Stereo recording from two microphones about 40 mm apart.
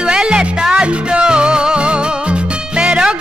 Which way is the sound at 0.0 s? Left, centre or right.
Right.